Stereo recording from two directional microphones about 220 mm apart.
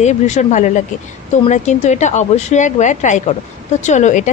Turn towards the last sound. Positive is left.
turn(degrees=35)  # may be behind; listen again after turning